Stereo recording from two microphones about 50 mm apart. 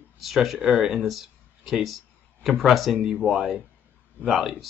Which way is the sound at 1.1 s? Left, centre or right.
Centre.